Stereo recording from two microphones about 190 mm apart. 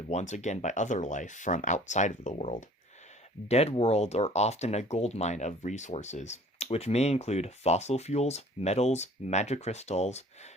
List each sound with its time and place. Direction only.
0.1 s speech: 35° left (ahead or behind)